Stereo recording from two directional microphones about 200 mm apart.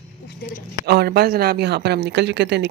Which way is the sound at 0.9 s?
50° right (ahead or behind).